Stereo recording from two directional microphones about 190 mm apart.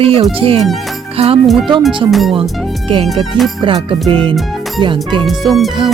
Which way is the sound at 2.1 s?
Centre (ahead or behind).